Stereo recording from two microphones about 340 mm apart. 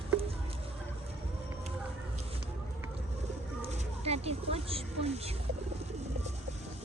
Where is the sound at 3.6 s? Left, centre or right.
Centre.